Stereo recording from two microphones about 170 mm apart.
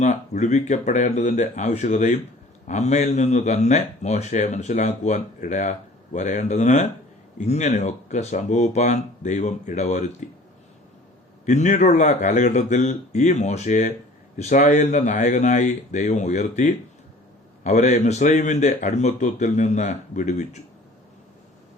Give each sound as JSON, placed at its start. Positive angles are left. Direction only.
{"t": 0.0, "sound": "a man's voice", "side_deg": 45}
{"t": 11.4, "sound": "a man's voice", "side_deg": 45}